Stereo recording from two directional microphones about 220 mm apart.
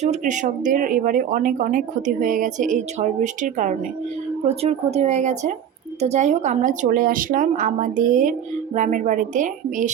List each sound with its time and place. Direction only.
0.0 s a woman's voice: 30° right (ahead or behind)